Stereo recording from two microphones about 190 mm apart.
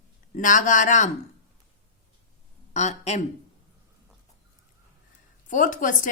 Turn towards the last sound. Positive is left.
turn(degrees=45)  # may be behind; listen again after turning